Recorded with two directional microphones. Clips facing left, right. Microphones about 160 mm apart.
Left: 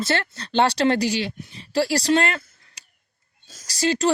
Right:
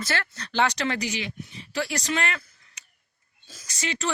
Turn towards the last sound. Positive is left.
turn(degrees=35)  # may be behind; listen again after turning